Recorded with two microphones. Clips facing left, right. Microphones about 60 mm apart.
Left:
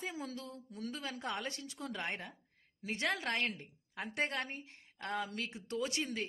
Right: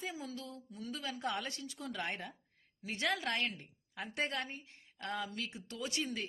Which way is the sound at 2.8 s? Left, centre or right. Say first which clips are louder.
Even; left.